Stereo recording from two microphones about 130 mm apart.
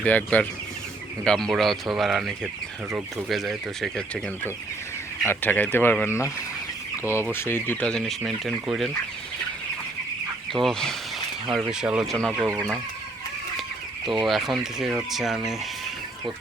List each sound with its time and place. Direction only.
0.0 s speech: 10° left (ahead or behind)
5.2 s speech: 15° left (ahead or behind)
7.3 s speech: 20° left (ahead or behind); by 8.9 s centre (ahead or behind)
10.5 s speech: 5° left (ahead or behind)
14.0 s speech: centre (ahead or behind)